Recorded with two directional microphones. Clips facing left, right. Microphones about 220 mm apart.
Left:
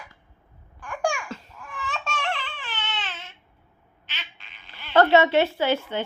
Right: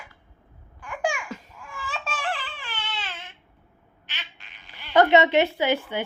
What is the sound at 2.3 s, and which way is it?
Baby cry, 10° right (ahead or behind).